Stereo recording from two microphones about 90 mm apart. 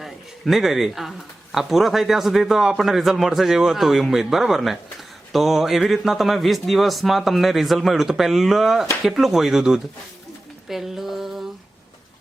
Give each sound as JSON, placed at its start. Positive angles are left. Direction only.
{"t": 0.0, "sound": "a sound", "side_deg": 0}
{"t": 1.5, "sound": "a man's voice", "side_deg": 0}
{"t": 10.7, "sound": "mantra", "side_deg": -5}